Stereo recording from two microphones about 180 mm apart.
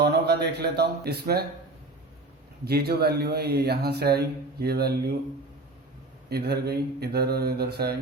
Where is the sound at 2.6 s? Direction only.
60° right (ahead or behind).